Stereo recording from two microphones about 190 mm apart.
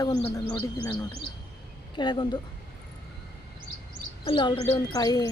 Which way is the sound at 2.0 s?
25° left (ahead or behind).